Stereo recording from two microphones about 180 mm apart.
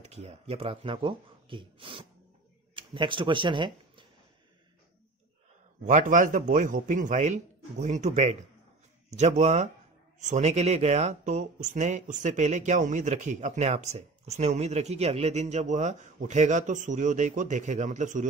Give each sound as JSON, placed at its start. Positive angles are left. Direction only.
{"t": 0.0, "sound": "speech", "side_deg": -35}
{"t": 5.9, "sound": "speech", "side_deg": -45}